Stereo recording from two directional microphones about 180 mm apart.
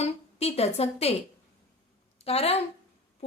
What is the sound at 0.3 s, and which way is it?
Speech, 35° left (ahead or behind).